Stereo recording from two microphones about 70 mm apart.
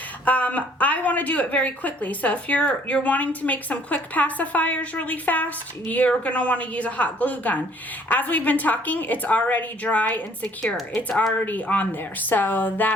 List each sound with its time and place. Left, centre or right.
0.3 s a woman's voice: left